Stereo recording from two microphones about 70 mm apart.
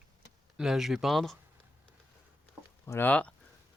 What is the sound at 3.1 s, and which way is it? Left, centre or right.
Speech, centre.